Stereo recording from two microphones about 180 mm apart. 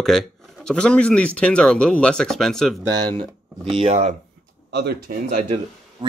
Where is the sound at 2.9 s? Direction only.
25° right (ahead or behind).